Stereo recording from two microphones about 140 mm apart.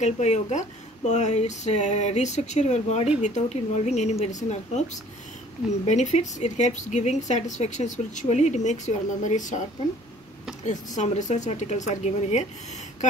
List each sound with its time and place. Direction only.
0.0 s a woman's voice: 55° left (ahead or behind)
5.9 s a woman's voice: 55° left (ahead or behind)
11.0 s a woman's voice: 60° left (ahead or behind)